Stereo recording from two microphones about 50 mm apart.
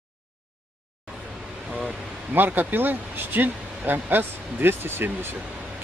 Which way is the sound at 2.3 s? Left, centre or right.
Right.